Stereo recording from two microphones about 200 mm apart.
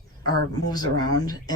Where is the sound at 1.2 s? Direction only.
20° left (ahead or behind).